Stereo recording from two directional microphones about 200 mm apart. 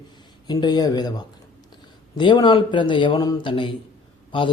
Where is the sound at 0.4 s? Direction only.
20° left (ahead or behind).